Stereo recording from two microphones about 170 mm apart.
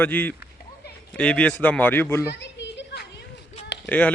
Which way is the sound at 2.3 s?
90° left.